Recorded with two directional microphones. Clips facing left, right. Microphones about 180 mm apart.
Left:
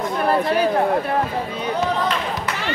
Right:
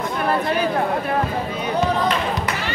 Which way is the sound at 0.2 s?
35° left (ahead or behind).